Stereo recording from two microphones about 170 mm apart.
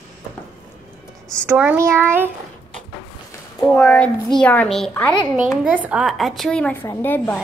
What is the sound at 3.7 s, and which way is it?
A woman's voice, 5° left (ahead or behind).